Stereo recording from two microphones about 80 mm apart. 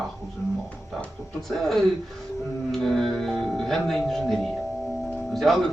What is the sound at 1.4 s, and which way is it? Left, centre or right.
Speech, centre.